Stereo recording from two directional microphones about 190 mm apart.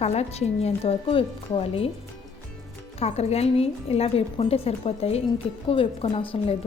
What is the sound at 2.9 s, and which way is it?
A woman's voice, 35° left (ahead or behind).